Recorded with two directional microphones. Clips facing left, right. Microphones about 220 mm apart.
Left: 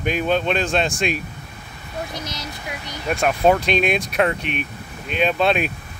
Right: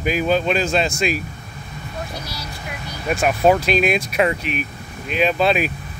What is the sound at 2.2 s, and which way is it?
Speech, 20° left (ahead or behind).